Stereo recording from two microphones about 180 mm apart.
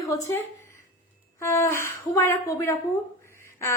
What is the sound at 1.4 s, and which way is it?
A woman's voice, 15° left (ahead or behind).